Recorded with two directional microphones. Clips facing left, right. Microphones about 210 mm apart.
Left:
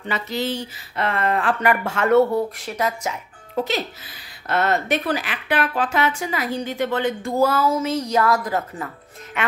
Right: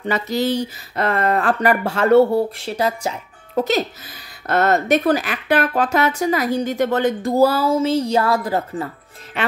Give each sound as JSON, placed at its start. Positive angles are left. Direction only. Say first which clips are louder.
{"t": 0.0, "sound": "speech", "louder": "right 5 dB", "side_deg": -40}